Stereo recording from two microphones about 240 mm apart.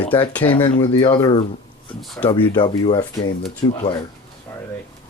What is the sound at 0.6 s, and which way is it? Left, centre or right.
Speech, centre.